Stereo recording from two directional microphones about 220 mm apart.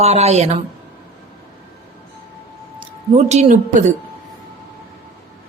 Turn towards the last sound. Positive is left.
turn(degrees=-35)  # may be behind; listen again after turning